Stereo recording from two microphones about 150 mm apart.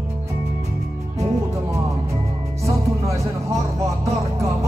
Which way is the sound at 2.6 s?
20° right (ahead or behind).